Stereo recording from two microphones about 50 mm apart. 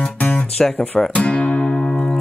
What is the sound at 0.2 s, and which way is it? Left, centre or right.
Music, left.